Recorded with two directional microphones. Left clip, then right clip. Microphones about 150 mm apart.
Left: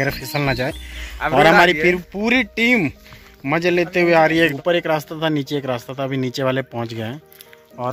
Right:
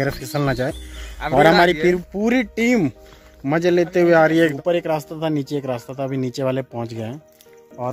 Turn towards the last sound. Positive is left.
turn(degrees=5)  # may be behind; listen again after turning